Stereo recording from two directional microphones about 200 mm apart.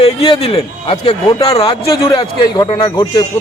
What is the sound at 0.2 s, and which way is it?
A man's voice, 30° left (ahead or behind).